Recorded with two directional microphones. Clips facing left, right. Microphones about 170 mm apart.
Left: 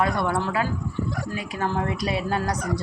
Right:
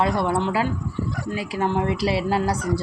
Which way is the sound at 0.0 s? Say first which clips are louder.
Right 2 dB; 25° right (ahead or behind).